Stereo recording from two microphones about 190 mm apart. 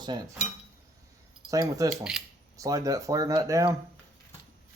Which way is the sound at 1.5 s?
15° right (ahead or behind).